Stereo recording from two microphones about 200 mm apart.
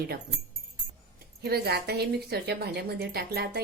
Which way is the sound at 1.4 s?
55° right (ahead or behind).